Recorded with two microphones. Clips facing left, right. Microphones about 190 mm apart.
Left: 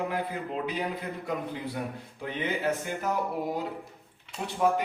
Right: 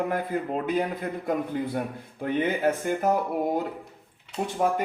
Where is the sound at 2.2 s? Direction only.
50° right (ahead or behind).